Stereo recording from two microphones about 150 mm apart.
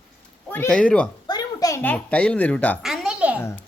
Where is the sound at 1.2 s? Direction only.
25° left (ahead or behind).